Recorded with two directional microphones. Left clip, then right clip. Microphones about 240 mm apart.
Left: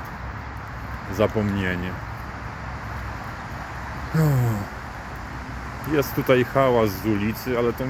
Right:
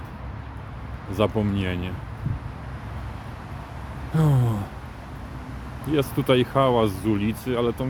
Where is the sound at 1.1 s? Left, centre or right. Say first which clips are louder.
Left 1 dB; centre.